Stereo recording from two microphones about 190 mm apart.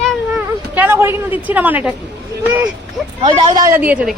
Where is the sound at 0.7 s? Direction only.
10° right (ahead or behind).